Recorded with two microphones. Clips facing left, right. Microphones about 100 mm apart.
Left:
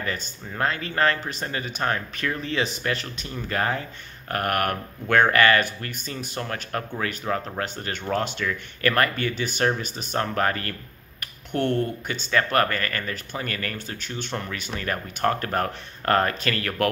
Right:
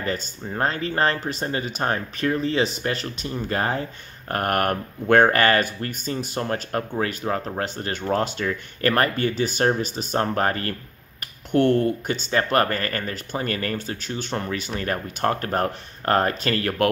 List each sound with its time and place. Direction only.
0.0 s speech: 35° right (ahead or behind)